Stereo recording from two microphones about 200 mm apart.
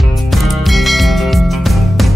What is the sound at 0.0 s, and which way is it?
Music, centre (ahead or behind).